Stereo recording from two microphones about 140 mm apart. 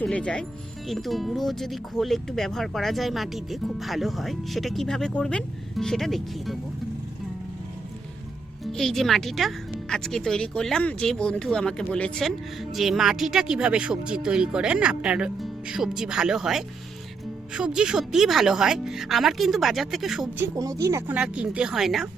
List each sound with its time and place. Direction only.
0.0 s speech: 10° left (ahead or behind)
8.6 s speech: 5° left (ahead or behind)
20.4 s speech: 20° right (ahead or behind)
21.2 s speech: 10° right (ahead or behind)